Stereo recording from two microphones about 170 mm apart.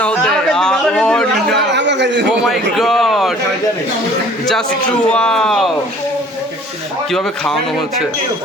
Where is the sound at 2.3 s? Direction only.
Centre (ahead or behind).